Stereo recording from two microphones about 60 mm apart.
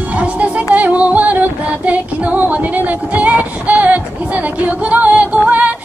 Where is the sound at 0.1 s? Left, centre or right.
Right.